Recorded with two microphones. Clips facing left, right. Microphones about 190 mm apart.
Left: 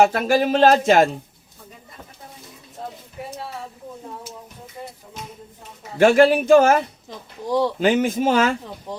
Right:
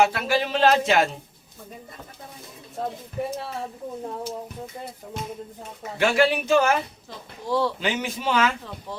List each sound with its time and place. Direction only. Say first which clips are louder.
0.0 s speech: left 5 dB; 45° left (ahead or behind)
6.0 s speech: left 7 dB; 45° left (ahead or behind)
7.4 s speech: left 3 dB; 15° left (ahead or behind)
7.8 s speech: left 9 dB; 50° left (ahead or behind)
8.9 s speech: left 3 dB; 15° left (ahead or behind)